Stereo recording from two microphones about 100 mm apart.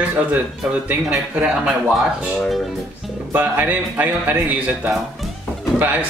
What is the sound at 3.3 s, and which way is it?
Speech, 15° right (ahead or behind).